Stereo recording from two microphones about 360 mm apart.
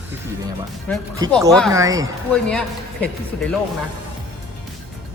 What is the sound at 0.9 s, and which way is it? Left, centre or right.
Speech, centre.